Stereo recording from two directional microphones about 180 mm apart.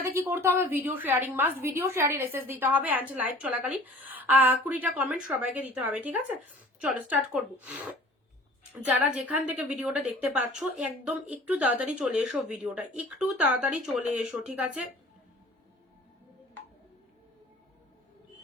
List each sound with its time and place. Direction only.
0.0 s a woman's voice: 10° right (ahead or behind)
8.7 s a woman's voice: 10° right (ahead or behind)